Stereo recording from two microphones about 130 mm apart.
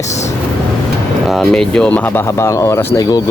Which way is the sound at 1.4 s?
5° left (ahead or behind).